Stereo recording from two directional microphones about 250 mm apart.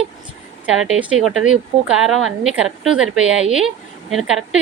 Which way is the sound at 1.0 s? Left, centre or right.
Centre.